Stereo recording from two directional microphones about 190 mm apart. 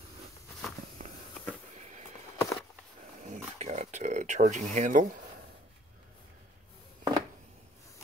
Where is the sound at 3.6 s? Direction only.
35° right (ahead or behind).